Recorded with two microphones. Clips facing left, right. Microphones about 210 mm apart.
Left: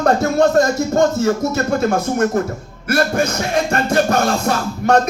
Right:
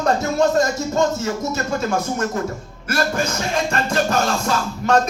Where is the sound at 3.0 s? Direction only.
35° left (ahead or behind).